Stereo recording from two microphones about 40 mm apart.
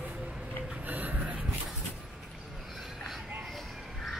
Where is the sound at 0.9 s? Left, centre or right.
Right.